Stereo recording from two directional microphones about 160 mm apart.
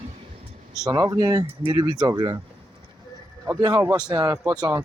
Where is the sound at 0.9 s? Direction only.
25° right (ahead or behind).